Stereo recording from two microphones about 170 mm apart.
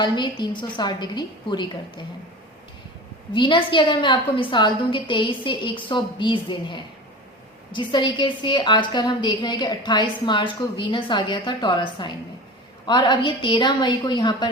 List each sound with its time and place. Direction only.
0.0 s a woman's voice: 25° left (ahead or behind)
3.3 s a woman's voice: 30° left (ahead or behind)